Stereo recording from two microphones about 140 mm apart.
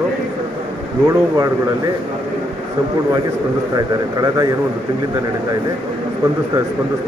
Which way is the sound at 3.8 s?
25° right (ahead or behind).